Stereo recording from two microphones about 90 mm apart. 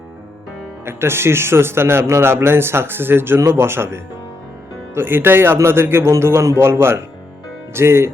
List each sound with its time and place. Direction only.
0.9 s a man's voice: 30° right (ahead or behind)